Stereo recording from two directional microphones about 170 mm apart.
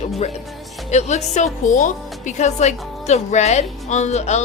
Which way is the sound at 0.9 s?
40° left (ahead or behind).